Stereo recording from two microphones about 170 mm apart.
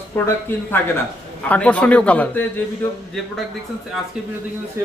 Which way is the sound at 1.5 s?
10° left (ahead or behind).